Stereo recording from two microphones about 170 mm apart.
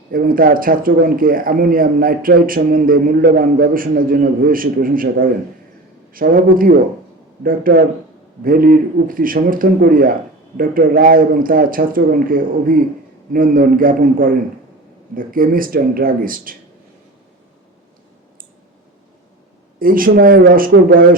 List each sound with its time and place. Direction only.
0.1 s a man's voice: 55° right (ahead or behind)
19.8 s a man's voice: 55° right (ahead or behind)